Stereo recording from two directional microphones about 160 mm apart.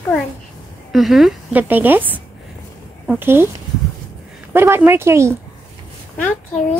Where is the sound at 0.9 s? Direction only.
Centre (ahead or behind).